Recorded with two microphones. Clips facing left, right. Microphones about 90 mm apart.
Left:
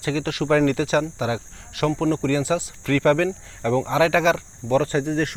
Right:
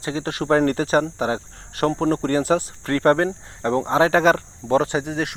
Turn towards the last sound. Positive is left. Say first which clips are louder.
# left 2 dB
turn(degrees=-5)  # may be behind; listen again after turning